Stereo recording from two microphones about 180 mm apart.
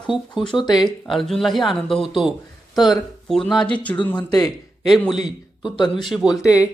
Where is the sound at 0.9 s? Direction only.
Centre (ahead or behind).